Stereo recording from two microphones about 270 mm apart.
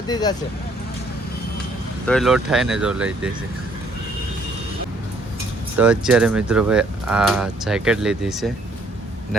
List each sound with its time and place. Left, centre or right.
0.1 s speech: centre
2.0 s speech: centre
5.7 s speech: centre